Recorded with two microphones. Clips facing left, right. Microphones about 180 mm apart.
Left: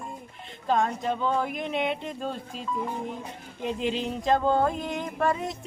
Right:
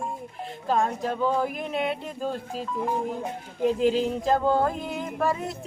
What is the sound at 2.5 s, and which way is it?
Speech, 40° right (ahead or behind).